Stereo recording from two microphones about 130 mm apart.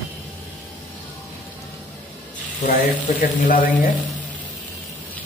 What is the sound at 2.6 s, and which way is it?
Speech, 75° left (ahead or behind).